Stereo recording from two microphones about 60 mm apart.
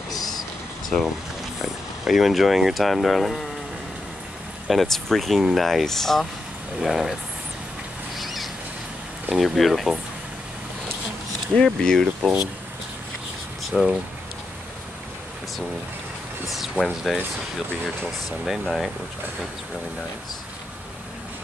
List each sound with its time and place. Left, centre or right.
0.1 s a sound: left
0.8 s speech: centre
4.6 s speech: centre
8.2 s a sound: centre
9.3 s speech: centre
11.5 s speech: centre
13.7 s speech: centre
16.4 s speech: centre
18.4 s speech: centre